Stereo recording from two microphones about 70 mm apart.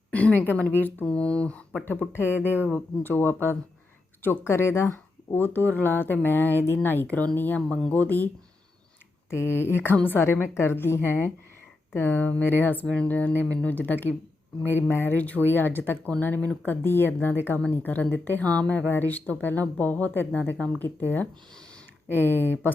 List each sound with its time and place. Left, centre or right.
0.1 s a woman's voice: left
1.0 s speech: centre
2.2 s speech: right
2.5 s a woman's voice: left
7.7 s speech: centre
8.0 s speech: left
9.3 s a woman's voice: left
15.4 s speech: left
18.4 s speech: centre
18.9 s a woman's voice: left